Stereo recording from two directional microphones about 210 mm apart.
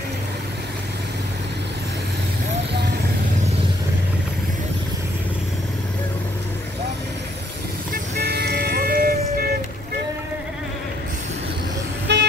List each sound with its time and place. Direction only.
7.9 s music: 50° right (ahead or behind)
12.1 s music: 55° right (ahead or behind)